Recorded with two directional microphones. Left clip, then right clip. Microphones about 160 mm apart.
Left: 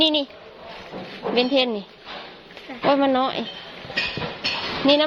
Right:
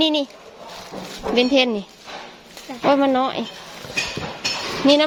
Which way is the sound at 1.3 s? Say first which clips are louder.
Right 3 dB; 35° right (ahead or behind).